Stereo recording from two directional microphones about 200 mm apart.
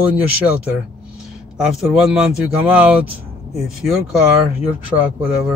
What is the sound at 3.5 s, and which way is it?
Speech, centre (ahead or behind).